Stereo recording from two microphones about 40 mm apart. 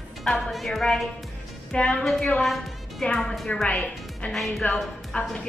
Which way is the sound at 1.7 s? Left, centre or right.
Left.